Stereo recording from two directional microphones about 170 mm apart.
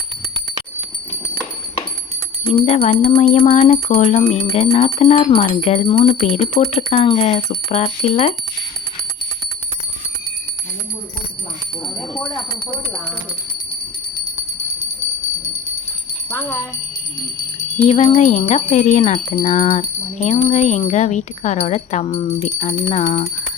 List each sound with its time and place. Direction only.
2.5 s wind chime: 40° left (ahead or behind)
16.3 s speech: 15° left (ahead or behind)
17.8 s jingle bell: 45° left (ahead or behind)
18.7 s wind chime: 45° left (ahead or behind)